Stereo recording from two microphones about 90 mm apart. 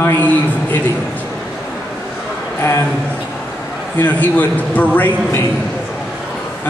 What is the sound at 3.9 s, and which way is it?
A man's voice, 20° left (ahead or behind).